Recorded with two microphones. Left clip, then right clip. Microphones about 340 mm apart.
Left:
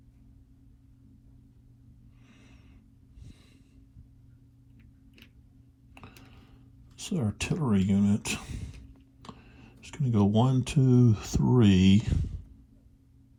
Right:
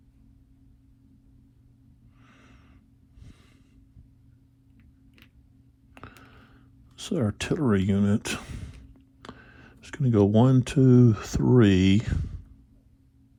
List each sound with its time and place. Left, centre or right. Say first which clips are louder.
2.2 s snort: right 3 dB; right
5.9 s a sound: right 4 dB; right
6.9 s speech: right 5 dB; right